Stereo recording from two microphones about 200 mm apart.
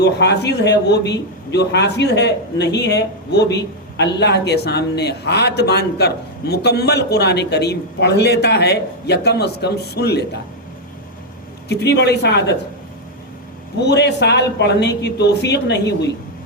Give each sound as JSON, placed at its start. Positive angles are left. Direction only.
{"t": 0.0, "sound": "a man's voice", "side_deg": 60}
{"t": 11.7, "sound": "a man's voice", "side_deg": 55}
{"t": 13.7, "sound": "a man's voice", "side_deg": 55}